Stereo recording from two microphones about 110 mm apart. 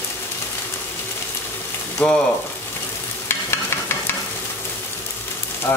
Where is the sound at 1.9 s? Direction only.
10° left (ahead or behind).